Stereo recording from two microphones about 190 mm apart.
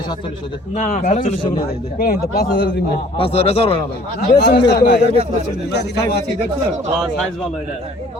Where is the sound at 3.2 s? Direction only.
30° left (ahead or behind).